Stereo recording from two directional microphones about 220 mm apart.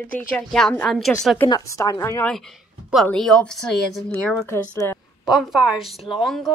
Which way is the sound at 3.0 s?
5° left (ahead or behind).